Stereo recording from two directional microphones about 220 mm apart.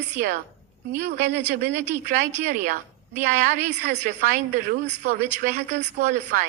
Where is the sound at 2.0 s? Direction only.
35° right (ahead or behind).